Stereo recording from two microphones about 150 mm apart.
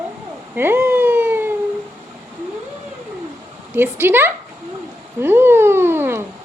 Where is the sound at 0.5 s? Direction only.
15° right (ahead or behind).